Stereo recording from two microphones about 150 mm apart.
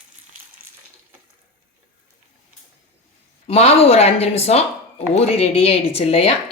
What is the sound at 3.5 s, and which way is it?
Speech, 45° left (ahead or behind).